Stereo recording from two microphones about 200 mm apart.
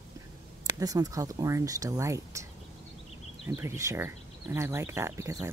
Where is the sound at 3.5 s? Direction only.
15° right (ahead or behind).